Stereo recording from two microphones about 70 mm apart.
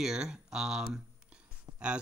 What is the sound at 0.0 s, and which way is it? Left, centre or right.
Speech, centre.